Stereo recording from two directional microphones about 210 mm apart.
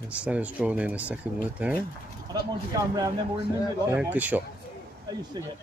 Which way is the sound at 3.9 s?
10° right (ahead or behind).